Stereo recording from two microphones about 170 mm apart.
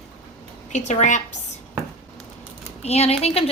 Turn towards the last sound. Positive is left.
turn(degrees=35)  # may be behind; listen again after turning